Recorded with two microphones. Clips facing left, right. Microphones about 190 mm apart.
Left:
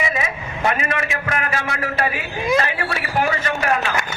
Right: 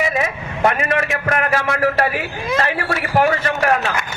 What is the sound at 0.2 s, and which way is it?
A man's voice, 55° right (ahead or behind).